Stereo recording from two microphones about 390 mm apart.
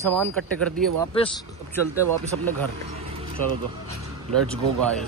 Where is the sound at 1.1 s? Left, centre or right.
Centre.